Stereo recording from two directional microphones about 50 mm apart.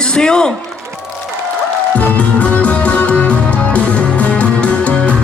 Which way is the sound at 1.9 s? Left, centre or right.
Left.